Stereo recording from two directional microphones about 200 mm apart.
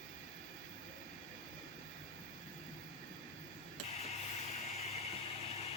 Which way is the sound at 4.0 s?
35° left (ahead or behind).